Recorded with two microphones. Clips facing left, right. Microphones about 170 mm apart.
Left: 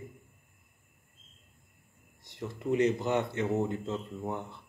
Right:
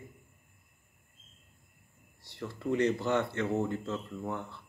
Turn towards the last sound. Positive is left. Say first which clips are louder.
# left 1 dB
turn(degrees=20)  # may be behind; listen again after turning